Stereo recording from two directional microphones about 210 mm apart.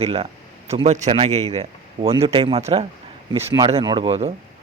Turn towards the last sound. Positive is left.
turn(degrees=-25)  # may be behind; listen again after turning